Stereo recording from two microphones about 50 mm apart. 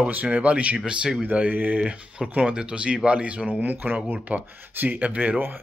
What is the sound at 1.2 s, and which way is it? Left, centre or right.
Speech, right.